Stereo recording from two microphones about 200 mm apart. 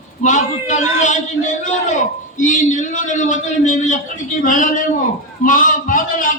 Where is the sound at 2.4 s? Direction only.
40° left (ahead or behind).